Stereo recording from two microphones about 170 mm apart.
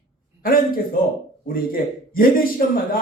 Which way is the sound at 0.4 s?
55° left (ahead or behind).